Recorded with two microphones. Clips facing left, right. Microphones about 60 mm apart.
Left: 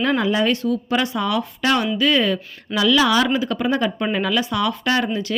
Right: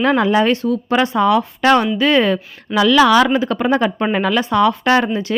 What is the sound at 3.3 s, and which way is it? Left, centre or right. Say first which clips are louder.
Speech: right 4 dB; right.